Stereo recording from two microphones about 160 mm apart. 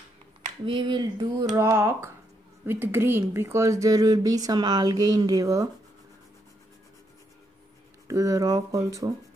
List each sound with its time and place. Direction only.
0.7 s speech: 25° right (ahead or behind)
8.1 s speech: 20° right (ahead or behind)